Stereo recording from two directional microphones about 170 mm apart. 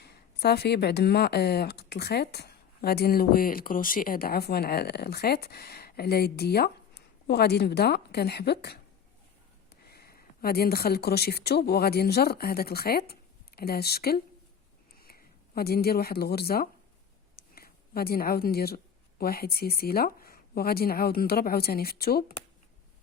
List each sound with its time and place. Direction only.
0.0 s speech: 70° left (ahead or behind)
9.8 s speech: 70° left (ahead or behind)
17.3 s a sound: 65° left (ahead or behind)
19.2 s speech: 65° left (ahead or behind)